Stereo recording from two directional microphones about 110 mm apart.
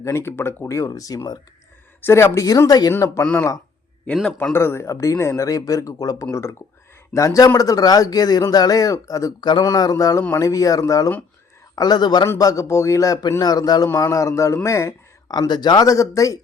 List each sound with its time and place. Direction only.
0.0 s a man's voice: 25° left (ahead or behind)
2.0 s a man's voice: 20° left (ahead or behind)
4.0 s a man's voice: 5° left (ahead or behind)
4.5 s a man's voice: 25° left (ahead or behind)